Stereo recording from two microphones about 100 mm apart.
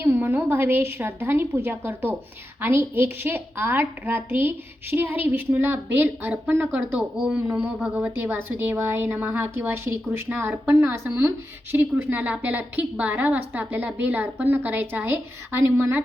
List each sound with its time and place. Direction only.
0.0 s a woman's voice: 20° right (ahead or behind)
8.4 s a woman's voice: 25° right (ahead or behind)